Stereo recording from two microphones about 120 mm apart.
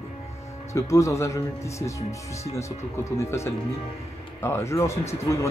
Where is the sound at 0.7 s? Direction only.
25° left (ahead or behind).